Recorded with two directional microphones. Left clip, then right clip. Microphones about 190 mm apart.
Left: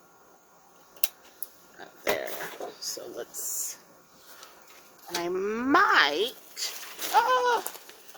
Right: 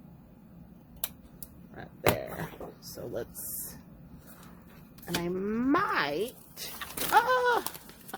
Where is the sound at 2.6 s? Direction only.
30° left (ahead or behind).